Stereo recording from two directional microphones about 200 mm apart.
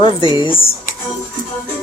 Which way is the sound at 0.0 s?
25° left (ahead or behind).